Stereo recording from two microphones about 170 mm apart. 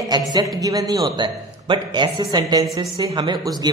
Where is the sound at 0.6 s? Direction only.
20° right (ahead or behind).